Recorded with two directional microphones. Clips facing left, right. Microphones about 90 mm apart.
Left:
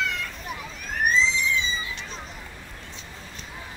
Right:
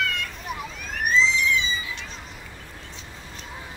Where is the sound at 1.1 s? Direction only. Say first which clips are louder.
Right 3 dB; 35° left (ahead or behind).